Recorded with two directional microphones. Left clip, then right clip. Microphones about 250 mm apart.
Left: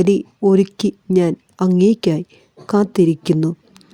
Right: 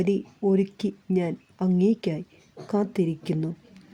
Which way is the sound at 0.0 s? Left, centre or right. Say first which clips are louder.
Left 10 dB; left.